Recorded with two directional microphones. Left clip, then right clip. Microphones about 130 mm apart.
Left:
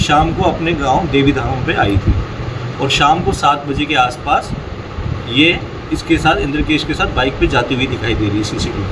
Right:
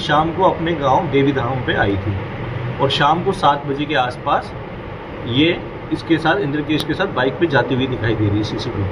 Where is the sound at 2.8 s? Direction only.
20° left (ahead or behind).